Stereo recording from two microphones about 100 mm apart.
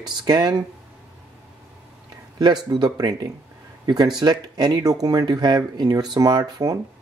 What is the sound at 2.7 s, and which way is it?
Speech, 45° right (ahead or behind).